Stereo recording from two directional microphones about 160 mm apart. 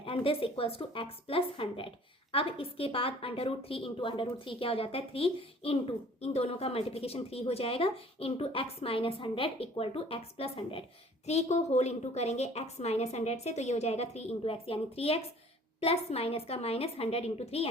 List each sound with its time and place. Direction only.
0.0 s a woman's voice: 35° left (ahead or behind)